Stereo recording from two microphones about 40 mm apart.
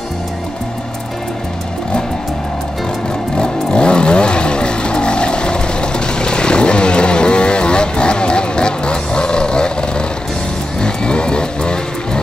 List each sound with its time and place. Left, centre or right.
3.3 s vehicle: left